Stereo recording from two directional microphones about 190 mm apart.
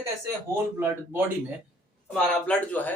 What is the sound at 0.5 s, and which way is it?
Speech, 10° right (ahead or behind).